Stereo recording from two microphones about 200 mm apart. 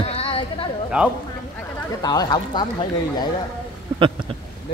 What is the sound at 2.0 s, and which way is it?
Speech, 20° left (ahead or behind).